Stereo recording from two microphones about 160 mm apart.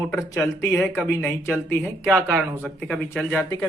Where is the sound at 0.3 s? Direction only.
15° left (ahead or behind).